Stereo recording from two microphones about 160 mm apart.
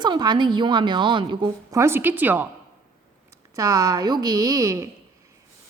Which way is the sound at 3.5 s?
20° right (ahead or behind).